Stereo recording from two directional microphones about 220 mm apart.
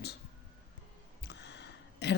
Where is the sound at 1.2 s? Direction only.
50° left (ahead or behind).